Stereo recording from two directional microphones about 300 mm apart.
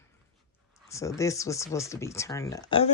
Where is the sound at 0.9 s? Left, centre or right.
Centre.